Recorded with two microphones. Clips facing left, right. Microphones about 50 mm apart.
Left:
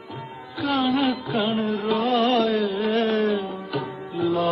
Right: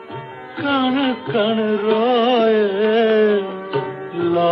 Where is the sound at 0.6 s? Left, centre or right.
Right.